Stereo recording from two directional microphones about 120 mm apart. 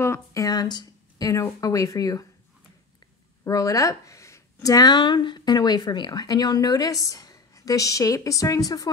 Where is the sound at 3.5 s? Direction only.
30° left (ahead or behind).